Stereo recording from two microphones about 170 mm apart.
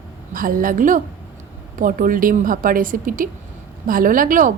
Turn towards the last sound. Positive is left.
turn(degrees=-55)  # may be behind; listen again after turning